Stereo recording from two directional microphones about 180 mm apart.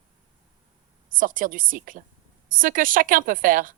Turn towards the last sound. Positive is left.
turn(degrees=-50)  # may be behind; listen again after turning